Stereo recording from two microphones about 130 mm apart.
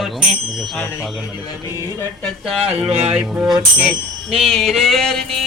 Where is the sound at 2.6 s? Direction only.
55° right (ahead or behind).